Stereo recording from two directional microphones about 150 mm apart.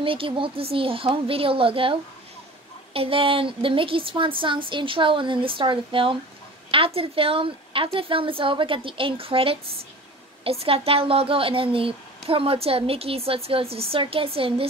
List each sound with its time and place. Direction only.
0.0 s speech: 35° right (ahead or behind)